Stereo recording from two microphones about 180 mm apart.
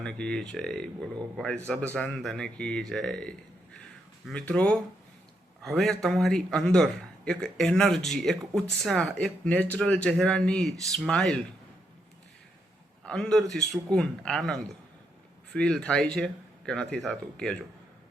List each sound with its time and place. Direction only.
0.0 s speech: 5° left (ahead or behind)
13.1 s speech: 5° left (ahead or behind)